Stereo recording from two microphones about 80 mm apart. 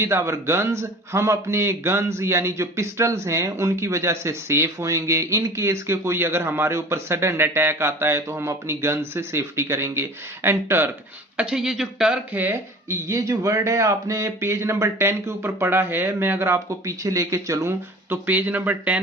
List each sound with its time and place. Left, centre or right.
0.0 s a man's voice: right
11.3 s speech: centre
12.3 s speech: right
12.9 s a man's voice: right
18.1 s speech: right